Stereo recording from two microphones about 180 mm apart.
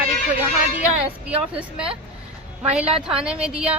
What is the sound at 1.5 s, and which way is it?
A woman's voice, 5° right (ahead or behind).